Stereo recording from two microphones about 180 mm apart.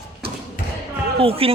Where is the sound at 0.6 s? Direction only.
65° left (ahead or behind).